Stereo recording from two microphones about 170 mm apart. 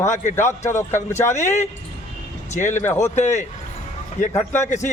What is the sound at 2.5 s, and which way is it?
Speech, 45° left (ahead or behind).